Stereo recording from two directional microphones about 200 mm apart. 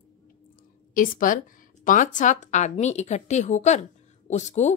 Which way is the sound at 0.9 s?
45° left (ahead or behind).